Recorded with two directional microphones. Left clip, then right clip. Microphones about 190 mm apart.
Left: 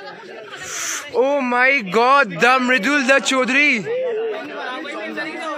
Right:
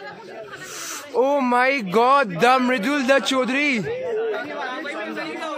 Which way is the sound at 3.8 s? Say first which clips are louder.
Left 3 dB; 35° right (ahead or behind).